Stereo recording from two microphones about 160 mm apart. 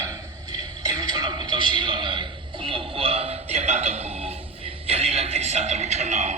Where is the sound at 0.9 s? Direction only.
25° right (ahead or behind).